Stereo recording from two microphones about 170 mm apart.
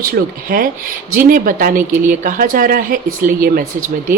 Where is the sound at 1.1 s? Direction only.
55° right (ahead or behind).